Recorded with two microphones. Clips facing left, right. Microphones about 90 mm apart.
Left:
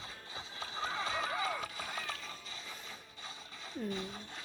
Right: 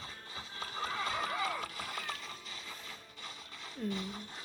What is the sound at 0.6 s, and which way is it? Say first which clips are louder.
Music: right 1 dB; 45° right (ahead or behind).